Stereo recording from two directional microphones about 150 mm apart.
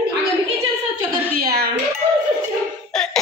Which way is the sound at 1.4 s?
90° right.